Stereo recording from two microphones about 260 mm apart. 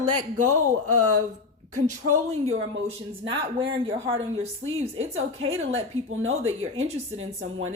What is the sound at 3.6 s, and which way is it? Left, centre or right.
A woman's voice, right.